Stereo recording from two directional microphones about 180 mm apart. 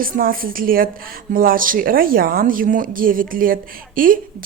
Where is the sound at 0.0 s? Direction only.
50° right (ahead or behind).